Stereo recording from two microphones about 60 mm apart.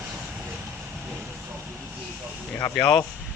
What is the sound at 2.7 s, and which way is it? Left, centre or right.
Speech, centre.